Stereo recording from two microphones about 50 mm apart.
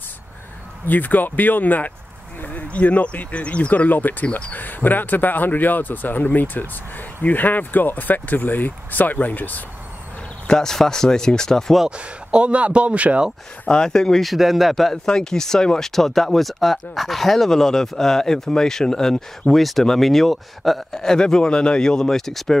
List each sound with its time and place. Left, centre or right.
0.8 s speech: left
10.5 s speech: centre
12.0 s speech: right
13.7 s speech: centre
14.2 s speech: centre